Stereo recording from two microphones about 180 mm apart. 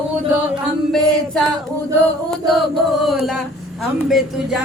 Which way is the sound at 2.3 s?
Centre (ahead or behind).